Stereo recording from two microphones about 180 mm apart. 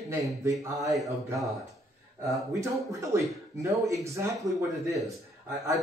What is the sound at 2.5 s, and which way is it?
Speech, 15° right (ahead or behind).